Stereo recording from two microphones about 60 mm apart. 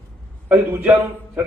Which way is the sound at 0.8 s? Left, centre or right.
Right.